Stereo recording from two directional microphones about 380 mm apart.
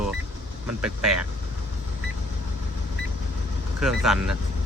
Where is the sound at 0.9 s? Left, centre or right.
Centre.